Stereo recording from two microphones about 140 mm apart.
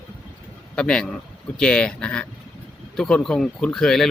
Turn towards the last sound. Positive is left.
turn(degrees=5)  # may be behind; listen again after turning